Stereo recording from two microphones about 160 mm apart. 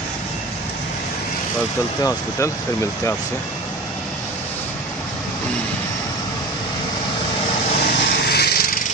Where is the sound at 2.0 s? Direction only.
20° left (ahead or behind).